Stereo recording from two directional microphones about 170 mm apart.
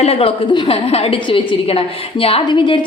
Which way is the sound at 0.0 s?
35° left (ahead or behind).